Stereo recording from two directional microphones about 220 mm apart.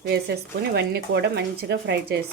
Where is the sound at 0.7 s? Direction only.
45° right (ahead or behind).